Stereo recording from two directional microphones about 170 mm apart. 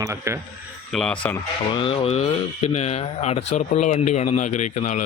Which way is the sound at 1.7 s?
30° left (ahead or behind).